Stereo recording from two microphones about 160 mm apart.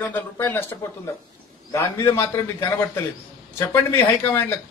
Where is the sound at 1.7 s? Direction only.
15° left (ahead or behind).